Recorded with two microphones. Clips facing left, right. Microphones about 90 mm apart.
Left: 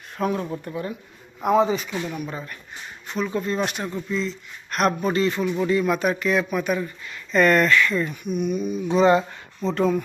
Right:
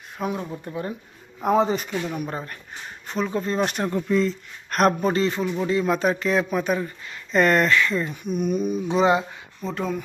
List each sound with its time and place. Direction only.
0.2 s speech: 15° right (ahead or behind)
0.6 s speech: 25° right (ahead or behind)
1.5 s speech: 40° right (ahead or behind)
8.9 s speech: 15° right (ahead or behind)
9.6 s speech: centre (ahead or behind)